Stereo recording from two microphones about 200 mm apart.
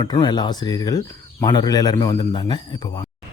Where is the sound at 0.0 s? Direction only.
20° left (ahead or behind).